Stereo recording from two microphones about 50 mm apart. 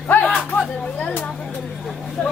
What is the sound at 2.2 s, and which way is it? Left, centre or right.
Vehicle, left.